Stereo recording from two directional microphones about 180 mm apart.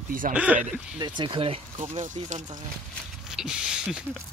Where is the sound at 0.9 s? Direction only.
25° right (ahead or behind); by 2.4 s 40° right (ahead or behind).